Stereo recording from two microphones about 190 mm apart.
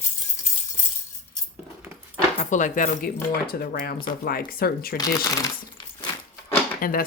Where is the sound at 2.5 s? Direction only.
45° left (ahead or behind).